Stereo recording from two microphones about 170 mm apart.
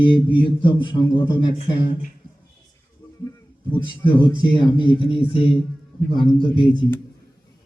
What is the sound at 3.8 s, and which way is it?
Speech, 30° left (ahead or behind).